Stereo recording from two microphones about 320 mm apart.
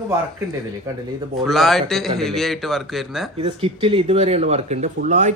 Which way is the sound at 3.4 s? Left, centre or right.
Centre.